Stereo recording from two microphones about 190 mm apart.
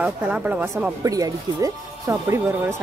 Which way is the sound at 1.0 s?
20° right (ahead or behind).